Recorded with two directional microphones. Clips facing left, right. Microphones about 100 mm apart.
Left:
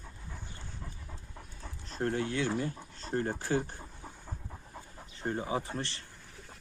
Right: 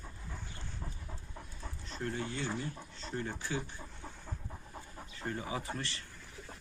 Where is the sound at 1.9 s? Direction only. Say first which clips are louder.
Left 6 dB; 50° left (ahead or behind).